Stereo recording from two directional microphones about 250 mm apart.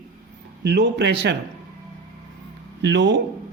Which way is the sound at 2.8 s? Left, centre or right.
Right.